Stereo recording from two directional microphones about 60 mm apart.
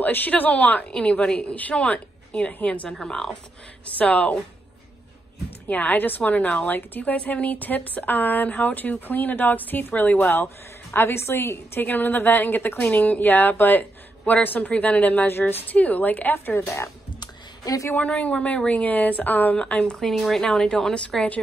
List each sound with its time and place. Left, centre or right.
0.0 s a woman's voice: left
0.8 s a woman's voice: centre
2.9 s speech: centre
4.0 s a woman's voice: left
5.7 s a woman's voice: left
16.6 s speech: left
17.9 s a woman's voice: left; by 21.3 s centre